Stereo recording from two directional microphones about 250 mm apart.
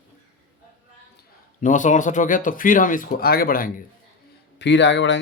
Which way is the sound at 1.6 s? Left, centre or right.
Left.